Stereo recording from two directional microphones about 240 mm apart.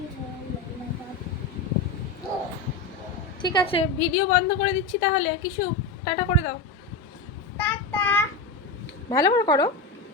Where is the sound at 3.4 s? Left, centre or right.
Left.